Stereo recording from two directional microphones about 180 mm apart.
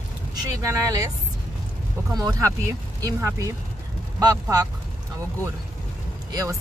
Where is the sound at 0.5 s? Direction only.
20° right (ahead or behind).